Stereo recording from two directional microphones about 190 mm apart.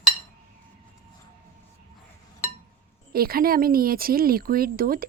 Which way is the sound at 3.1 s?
50° right (ahead or behind).